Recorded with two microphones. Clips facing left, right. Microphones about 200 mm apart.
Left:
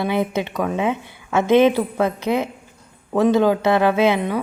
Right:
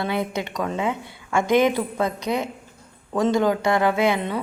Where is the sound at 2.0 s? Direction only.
15° right (ahead or behind).